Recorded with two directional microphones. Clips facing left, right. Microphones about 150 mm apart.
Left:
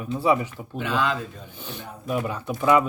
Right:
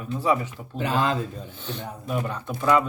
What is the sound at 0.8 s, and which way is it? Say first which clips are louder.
Speech: right 1 dB; 40° right (ahead or behind).